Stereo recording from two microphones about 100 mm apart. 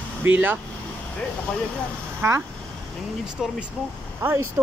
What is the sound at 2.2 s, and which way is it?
Speech, 25° right (ahead or behind).